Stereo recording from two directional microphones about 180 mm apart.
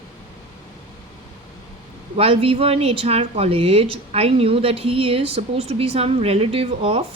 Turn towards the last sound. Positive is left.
turn(degrees=-35)  # may be behind; listen again after turning